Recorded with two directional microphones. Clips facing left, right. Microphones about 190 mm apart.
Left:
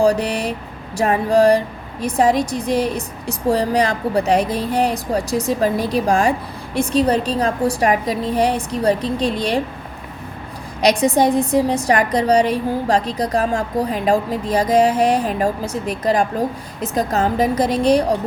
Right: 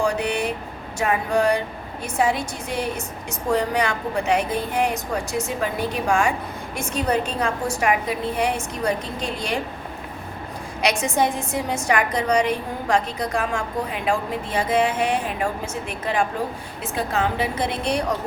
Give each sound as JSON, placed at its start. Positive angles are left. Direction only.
{"t": 0.0, "sound": "a woman's voice", "side_deg": 35}
{"t": 10.8, "sound": "a woman's voice", "side_deg": 35}